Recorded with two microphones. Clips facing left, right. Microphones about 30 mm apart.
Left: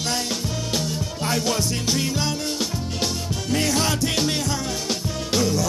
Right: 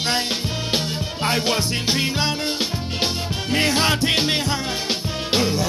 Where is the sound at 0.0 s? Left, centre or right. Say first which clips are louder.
Right 3 dB; right.